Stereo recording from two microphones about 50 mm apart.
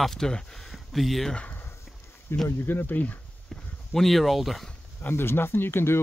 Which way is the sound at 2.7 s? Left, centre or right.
Left.